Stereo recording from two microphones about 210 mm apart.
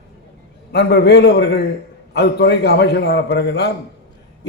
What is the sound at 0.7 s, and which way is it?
A man's voice, 50° left (ahead or behind).